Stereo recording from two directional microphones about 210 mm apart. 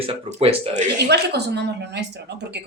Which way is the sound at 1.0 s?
50° right (ahead or behind).